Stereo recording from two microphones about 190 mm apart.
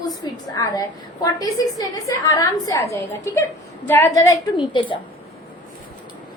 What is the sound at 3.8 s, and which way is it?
A woman's voice, 10° left (ahead or behind).